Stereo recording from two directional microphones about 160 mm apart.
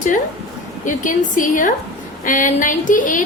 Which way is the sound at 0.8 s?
55° left (ahead or behind).